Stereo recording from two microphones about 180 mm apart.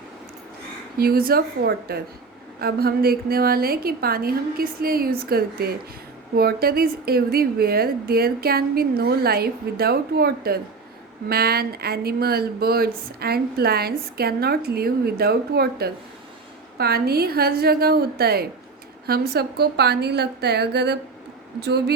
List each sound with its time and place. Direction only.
0.9 s speech: 55° right (ahead or behind)